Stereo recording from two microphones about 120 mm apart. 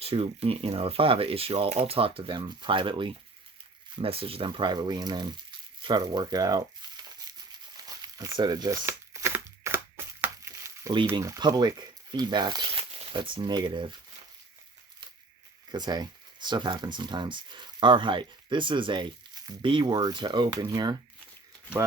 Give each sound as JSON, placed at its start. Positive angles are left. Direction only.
{"t": 0.0, "sound": "speech", "side_deg": -55}
{"t": 7.8, "sound": "crumpling", "side_deg": -30}
{"t": 8.9, "sound": "crushing", "side_deg": -20}
{"t": 11.1, "sound": "speech", "side_deg": -35}
{"t": 12.7, "sound": "speech", "side_deg": -55}
{"t": 15.7, "sound": "speech", "side_deg": -35}